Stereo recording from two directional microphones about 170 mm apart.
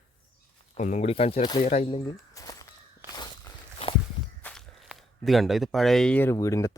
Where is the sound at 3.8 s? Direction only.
35° left (ahead or behind).